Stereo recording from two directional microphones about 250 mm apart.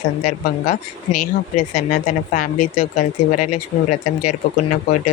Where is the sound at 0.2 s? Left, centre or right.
Left.